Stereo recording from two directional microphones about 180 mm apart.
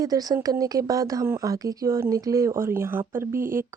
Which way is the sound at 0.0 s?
20° right (ahead or behind).